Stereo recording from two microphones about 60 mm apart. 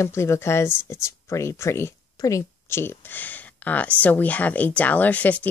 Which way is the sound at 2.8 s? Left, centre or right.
Left.